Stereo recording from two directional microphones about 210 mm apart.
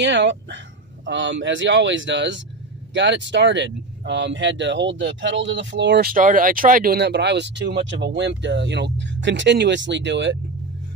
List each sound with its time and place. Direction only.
0.0 s speech: 55° right (ahead or behind)